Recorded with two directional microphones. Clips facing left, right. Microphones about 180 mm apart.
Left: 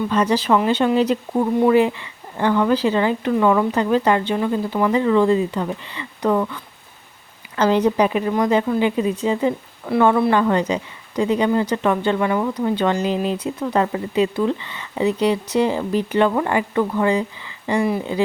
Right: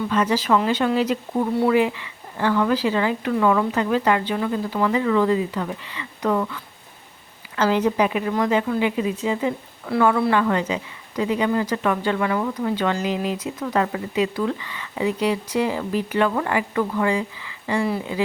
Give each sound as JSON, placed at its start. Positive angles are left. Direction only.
{"t": 0.1, "sound": "speech", "side_deg": 30}